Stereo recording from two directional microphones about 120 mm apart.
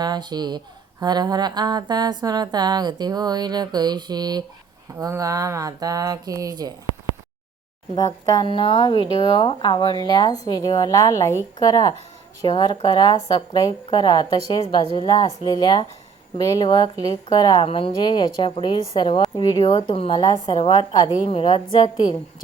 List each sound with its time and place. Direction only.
0.0 s speech: 35° right (ahead or behind)
7.9 s speech: 30° left (ahead or behind)
8.4 s a woman's voice: 45° left (ahead or behind)
17.7 s a woman's voice: 50° left (ahead or behind)
21.2 s a woman's voice: 50° left (ahead or behind)